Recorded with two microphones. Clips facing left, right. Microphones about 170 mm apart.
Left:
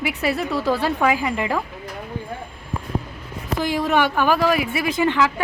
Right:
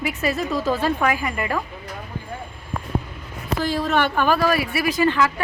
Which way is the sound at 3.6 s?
15° left (ahead or behind).